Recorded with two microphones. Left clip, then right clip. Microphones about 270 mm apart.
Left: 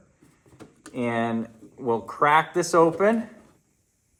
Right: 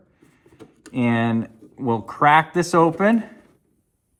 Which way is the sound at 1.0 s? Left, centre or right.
Right.